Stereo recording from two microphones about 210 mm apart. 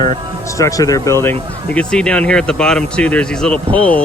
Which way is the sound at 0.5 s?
15° left (ahead or behind).